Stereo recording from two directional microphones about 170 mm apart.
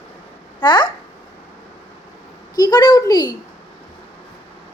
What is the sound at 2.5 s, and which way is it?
Speech, 25° left (ahead or behind).